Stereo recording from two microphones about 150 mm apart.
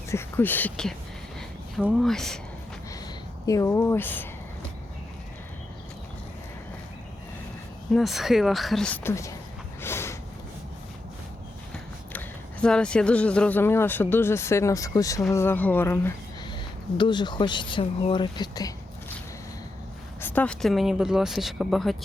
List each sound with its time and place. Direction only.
0.1 s speech: 15° left (ahead or behind)
3.4 s speech: 20° left (ahead or behind)
7.9 s speech: centre (ahead or behind)
9.0 s speech: 20° left (ahead or behind)
9.8 s a sound: 15° left (ahead or behind)
11.7 s speech: 5° left (ahead or behind)
17.0 s speech: 30° left (ahead or behind)
20.2 s speech: 10° left (ahead or behind)